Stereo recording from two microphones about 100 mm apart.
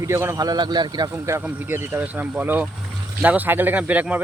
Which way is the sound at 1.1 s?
30° right (ahead or behind).